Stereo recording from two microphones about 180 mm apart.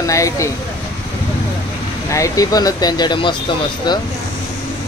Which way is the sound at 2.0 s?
20° left (ahead or behind).